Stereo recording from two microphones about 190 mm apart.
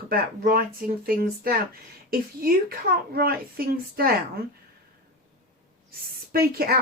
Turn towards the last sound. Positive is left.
turn(degrees=-55)  # may be behind; listen again after turning